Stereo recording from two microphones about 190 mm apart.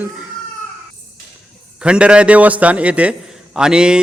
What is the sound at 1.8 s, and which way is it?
A man's voice, 5° right (ahead or behind).